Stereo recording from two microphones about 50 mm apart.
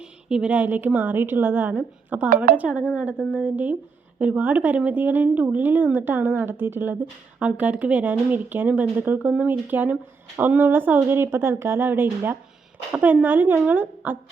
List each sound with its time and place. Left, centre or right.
0.0 s a sound: centre
0.5 s a woman's voice: right
2.1 s a woman's voice: right
7.3 s a woman's voice: right
12.9 s a woman's voice: right
13.2 s a woman's voice: right